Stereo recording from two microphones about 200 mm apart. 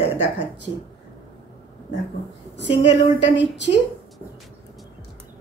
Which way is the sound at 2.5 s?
65° left (ahead or behind).